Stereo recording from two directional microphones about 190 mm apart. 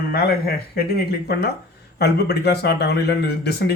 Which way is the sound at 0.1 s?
55° left (ahead or behind).